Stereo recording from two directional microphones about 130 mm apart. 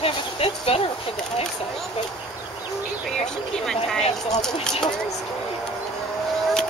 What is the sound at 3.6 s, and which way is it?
Speech, 5° left (ahead or behind).